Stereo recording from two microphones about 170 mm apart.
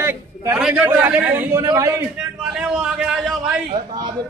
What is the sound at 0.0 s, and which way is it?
A man's voice, 15° right (ahead or behind).